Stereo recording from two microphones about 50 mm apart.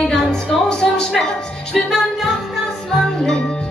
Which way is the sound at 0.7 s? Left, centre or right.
Centre.